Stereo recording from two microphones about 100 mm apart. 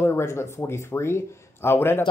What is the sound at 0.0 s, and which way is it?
Speech, 25° left (ahead or behind).